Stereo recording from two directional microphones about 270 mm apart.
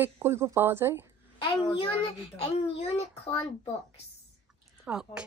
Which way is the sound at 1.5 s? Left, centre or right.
Centre.